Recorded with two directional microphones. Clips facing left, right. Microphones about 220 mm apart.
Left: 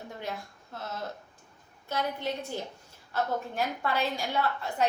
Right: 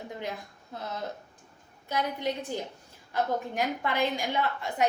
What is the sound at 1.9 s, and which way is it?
A woman's voice, 15° right (ahead or behind).